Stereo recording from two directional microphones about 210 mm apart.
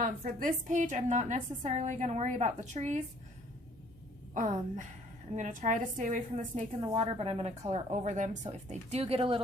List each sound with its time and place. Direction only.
0.0 s a woman's voice: 40° right (ahead or behind)
4.4 s a woman's voice: 35° right (ahead or behind)